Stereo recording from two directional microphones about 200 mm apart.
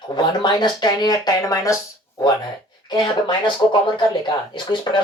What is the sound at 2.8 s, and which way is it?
Speech, 20° left (ahead or behind).